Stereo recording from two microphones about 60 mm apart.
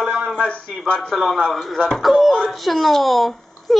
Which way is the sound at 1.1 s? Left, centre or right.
Centre.